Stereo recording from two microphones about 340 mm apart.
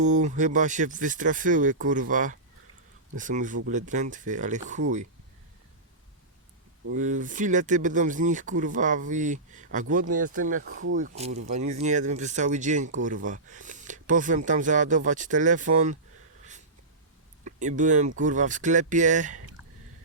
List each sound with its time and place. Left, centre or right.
0.0 s speech: right
6.9 s speech: right
10.6 s speech: right
10.9 s speech: right
17.4 s speech: right